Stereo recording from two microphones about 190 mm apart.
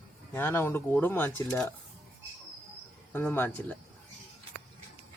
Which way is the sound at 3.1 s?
10° left (ahead or behind).